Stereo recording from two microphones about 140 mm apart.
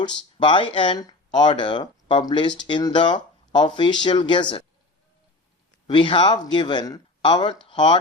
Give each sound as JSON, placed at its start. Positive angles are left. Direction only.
{"t": 0.3, "sound": "speech", "side_deg": 35}
{"t": 5.9, "sound": "speech", "side_deg": 35}